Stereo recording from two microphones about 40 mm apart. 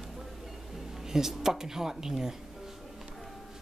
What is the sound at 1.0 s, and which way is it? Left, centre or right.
Speech, centre.